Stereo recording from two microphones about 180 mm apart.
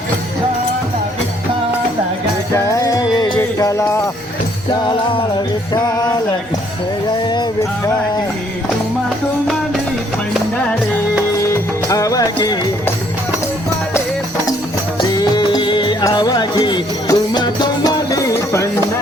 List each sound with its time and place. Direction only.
2.7 s music: 20° left (ahead or behind)
5.7 s music: 20° left (ahead or behind)
7.2 s music: 25° left (ahead or behind)
11.3 s music: 15° left (ahead or behind)
15.1 s music: 20° left (ahead or behind)